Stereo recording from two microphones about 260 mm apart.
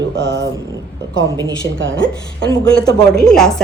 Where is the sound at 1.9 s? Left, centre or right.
Centre.